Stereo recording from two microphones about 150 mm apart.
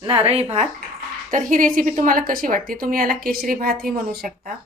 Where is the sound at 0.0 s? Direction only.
35° right (ahead or behind).